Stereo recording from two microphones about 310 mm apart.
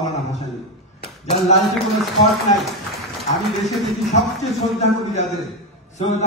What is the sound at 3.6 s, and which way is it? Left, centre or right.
Speech, centre.